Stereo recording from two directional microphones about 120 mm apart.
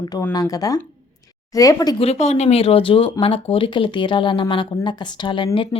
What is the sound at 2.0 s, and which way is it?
Speech, 60° left (ahead or behind).